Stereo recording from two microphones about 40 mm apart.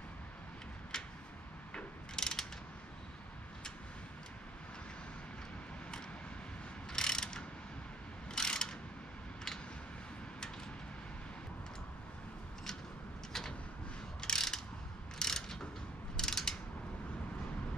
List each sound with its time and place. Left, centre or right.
0.9 s a sound: centre
2.1 s mechanisms: centre
6.9 s mechanisms: centre
13.3 s vehicle: centre
14.2 s mechanisms: centre
15.1 s pulleys: centre
16.2 s mechanisms: centre